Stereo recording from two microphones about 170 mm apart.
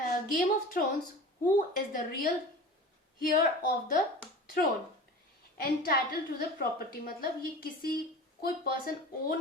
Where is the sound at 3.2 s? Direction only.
55° left (ahead or behind).